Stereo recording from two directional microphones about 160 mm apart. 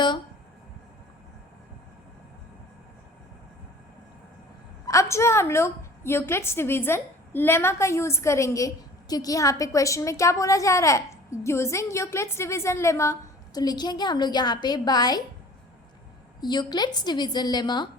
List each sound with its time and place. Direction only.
4.9 s a woman's voice: 20° left (ahead or behind)
16.4 s a woman's voice: 25° left (ahead or behind)